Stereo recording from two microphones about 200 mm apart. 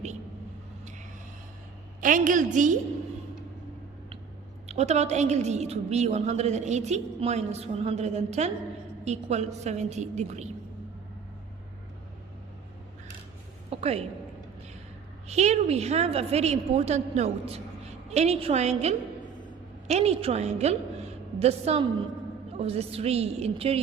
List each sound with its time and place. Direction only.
2.0 s a woman's voice: 40° right (ahead or behind)
4.7 s a woman's voice: 35° right (ahead or behind)
13.7 s a sound: 30° right (ahead or behind)
15.3 s a woman's voice: 35° right (ahead or behind)